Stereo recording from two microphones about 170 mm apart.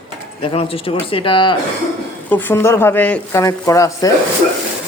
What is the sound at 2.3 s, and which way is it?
Speech, 10° left (ahead or behind).